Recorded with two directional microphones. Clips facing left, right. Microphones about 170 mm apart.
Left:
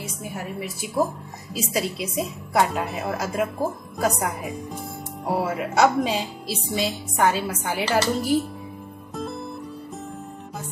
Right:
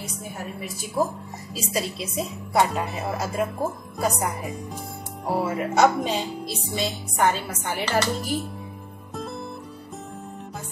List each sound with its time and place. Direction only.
1.5 s a woman's voice: centre (ahead or behind)